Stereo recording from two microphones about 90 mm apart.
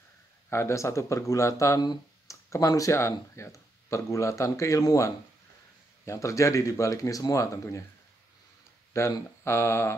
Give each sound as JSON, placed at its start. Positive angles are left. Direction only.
{"t": 0.5, "sound": "speech", "side_deg": 35}
{"t": 9.0, "sound": "speech", "side_deg": 30}